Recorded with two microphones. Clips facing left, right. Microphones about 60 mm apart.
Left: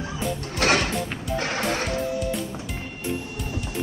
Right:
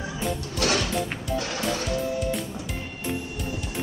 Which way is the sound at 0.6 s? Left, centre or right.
Left.